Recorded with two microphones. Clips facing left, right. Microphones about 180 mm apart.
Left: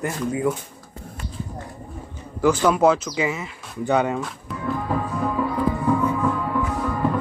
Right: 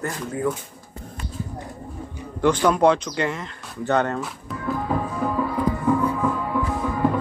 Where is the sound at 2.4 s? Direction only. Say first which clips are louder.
Even; 5° left (ahead or behind).